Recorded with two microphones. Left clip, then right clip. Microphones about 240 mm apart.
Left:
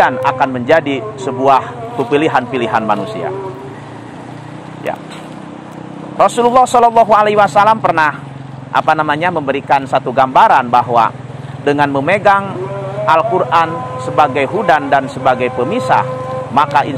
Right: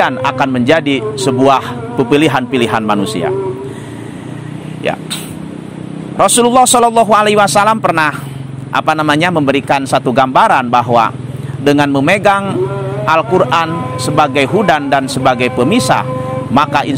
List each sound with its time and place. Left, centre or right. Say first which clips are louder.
0.0 s a man's voice: left 1 dB; right
6.1 s a man's voice: right 1 dB; right